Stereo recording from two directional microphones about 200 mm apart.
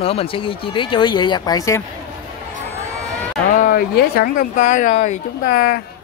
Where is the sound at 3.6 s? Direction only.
50° left (ahead or behind).